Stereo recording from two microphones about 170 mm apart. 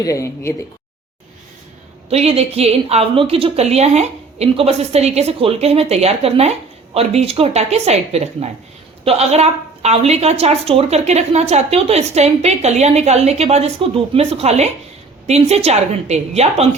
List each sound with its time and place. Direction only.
0.0 s speech: 20° left (ahead or behind)
2.0 s a woman's voice: 35° right (ahead or behind)